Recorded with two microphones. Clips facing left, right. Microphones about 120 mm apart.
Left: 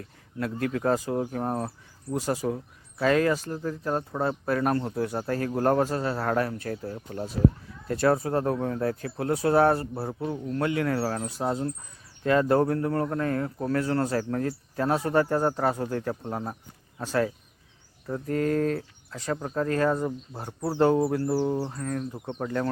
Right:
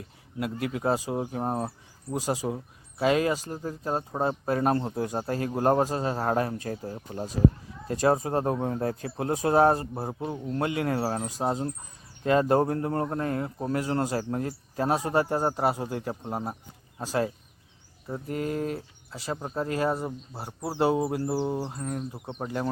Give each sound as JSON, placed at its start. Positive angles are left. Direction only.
{"t": 0.6, "sound": "speech", "side_deg": -15}